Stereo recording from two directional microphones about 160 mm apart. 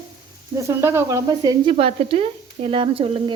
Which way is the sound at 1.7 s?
35° right (ahead or behind).